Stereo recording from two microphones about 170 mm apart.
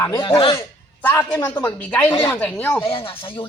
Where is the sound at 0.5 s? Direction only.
15° left (ahead or behind).